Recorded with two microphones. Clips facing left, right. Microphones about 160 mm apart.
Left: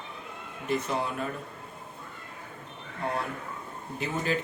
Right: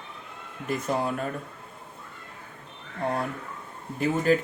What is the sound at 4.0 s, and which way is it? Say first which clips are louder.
Speech: right 7 dB; 45° right (ahead or behind).